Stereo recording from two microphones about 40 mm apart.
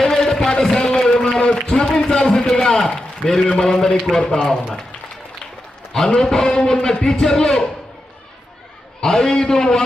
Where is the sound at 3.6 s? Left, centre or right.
Centre.